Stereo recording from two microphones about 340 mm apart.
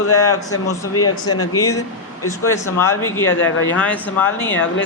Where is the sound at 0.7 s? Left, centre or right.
Left.